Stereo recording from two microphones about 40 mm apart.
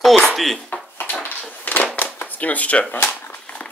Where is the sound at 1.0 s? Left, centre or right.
Left.